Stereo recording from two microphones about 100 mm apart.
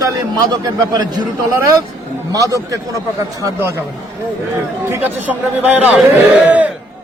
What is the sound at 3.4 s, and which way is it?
Speech, 30° right (ahead or behind).